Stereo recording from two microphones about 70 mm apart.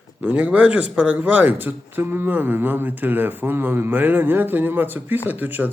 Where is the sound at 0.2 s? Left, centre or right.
Centre.